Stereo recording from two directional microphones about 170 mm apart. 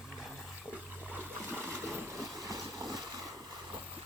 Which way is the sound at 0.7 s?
10° right (ahead or behind).